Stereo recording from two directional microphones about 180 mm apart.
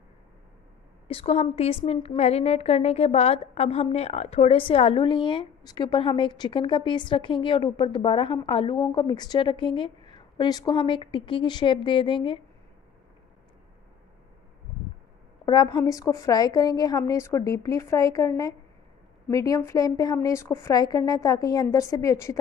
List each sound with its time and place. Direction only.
1.0 s a woman's voice: 35° left (ahead or behind)
15.4 s a woman's voice: 20° left (ahead or behind)